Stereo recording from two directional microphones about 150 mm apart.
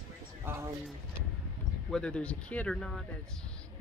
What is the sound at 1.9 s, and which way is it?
Speech, 5° left (ahead or behind).